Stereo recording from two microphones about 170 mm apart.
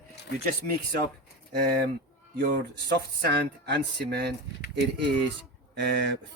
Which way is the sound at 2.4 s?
65° right (ahead or behind).